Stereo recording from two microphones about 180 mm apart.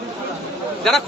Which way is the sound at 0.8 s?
Centre (ahead or behind).